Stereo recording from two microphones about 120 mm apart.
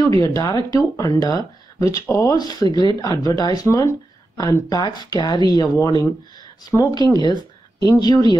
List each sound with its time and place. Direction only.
0.0 s speech: 30° left (ahead or behind)